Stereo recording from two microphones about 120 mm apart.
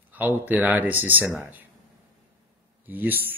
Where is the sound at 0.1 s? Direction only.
15° right (ahead or behind).